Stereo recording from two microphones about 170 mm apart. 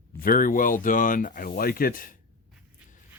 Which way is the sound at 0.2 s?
55° left (ahead or behind).